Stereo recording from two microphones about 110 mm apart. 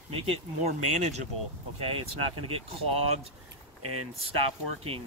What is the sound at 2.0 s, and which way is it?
Speech, 60° right (ahead or behind).